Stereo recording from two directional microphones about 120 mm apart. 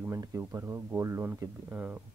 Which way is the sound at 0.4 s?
20° right (ahead or behind).